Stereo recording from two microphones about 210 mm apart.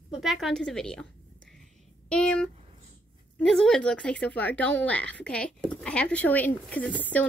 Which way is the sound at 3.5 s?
5° left (ahead or behind).